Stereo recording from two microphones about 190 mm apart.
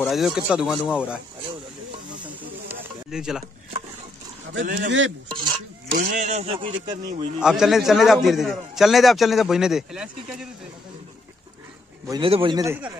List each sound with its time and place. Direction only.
0.0 s a man's voice: centre (ahead or behind)
2.2 s snake: 5° right (ahead or behind)
4.6 s speech: 65° right (ahead or behind)
5.9 s speech: 45° right (ahead or behind); by 7.2 s 25° right (ahead or behind)
7.3 s a man's voice: 5° right (ahead or behind)
12.1 s a man's voice: 25° right (ahead or behind)
12.6 s speech: 10° right (ahead or behind)